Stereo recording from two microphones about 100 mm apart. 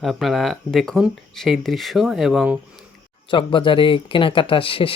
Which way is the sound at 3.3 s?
55° left (ahead or behind).